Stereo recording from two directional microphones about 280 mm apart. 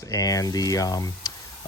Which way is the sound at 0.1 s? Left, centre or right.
Centre.